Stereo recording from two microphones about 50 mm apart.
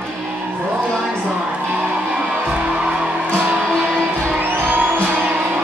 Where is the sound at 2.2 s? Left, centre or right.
Right.